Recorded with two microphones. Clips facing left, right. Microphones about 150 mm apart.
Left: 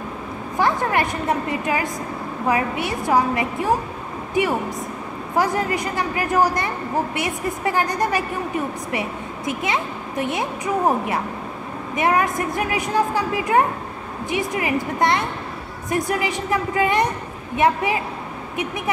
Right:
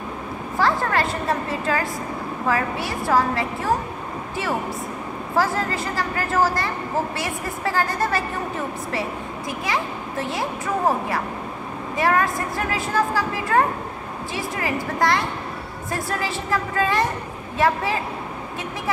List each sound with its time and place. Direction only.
0.6 s speech: 20° left (ahead or behind)
5.3 s a woman's voice: 20° left (ahead or behind)
9.5 s a woman's voice: 20° left (ahead or behind)